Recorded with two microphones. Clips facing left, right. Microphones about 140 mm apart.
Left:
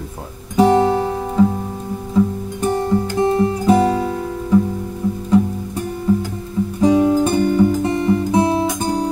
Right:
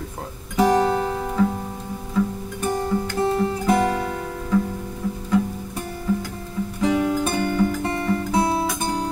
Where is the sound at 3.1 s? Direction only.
15° left (ahead or behind).